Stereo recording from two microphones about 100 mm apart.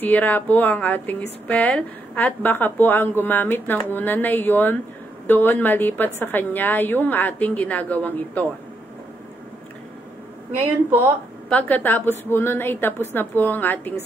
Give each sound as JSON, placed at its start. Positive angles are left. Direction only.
{"t": 0.0, "sound": "a woman's voice", "side_deg": 15}
{"t": 10.6, "sound": "a woman's voice", "side_deg": -15}
{"t": 11.4, "sound": "a woman's voice", "side_deg": 15}